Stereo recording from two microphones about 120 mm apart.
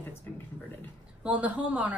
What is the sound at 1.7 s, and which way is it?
Speech, 10° right (ahead or behind).